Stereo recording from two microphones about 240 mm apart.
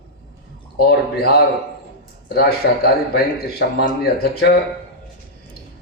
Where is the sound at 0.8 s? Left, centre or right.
Left.